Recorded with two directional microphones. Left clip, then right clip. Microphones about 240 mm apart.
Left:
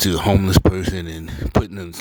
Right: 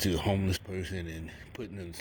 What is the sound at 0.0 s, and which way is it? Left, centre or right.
Speech, left.